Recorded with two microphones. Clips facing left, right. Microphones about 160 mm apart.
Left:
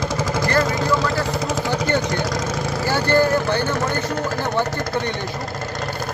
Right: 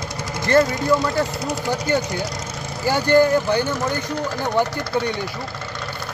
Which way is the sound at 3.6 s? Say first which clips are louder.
Left 2 dB; 55° left (ahead or behind).